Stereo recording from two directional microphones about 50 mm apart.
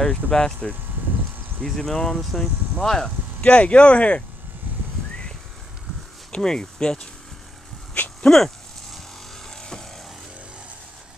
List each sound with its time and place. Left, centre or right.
0.0 s speech: centre
2.1 s speech: centre
2.8 s speech: centre
3.3 s speech: left
6.3 s speech: centre
7.9 s a sound: left
9.5 s vehicle: centre